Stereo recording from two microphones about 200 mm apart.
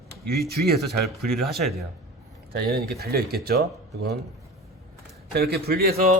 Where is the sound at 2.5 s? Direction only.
50° right (ahead or behind).